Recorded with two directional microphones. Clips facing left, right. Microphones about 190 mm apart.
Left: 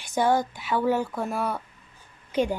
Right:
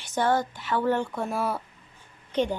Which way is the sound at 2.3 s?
10° left (ahead or behind).